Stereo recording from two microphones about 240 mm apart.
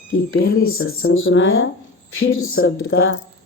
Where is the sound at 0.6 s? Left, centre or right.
Left.